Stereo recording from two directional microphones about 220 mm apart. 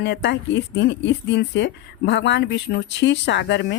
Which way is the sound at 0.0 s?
50° left (ahead or behind).